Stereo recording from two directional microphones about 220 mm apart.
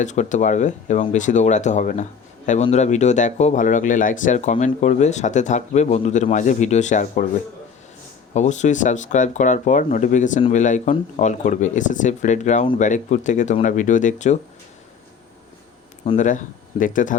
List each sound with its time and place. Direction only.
0.0 s speech: 35° left (ahead or behind)
8.3 s speech: 30° left (ahead or behind)
16.0 s speech: 35° left (ahead or behind)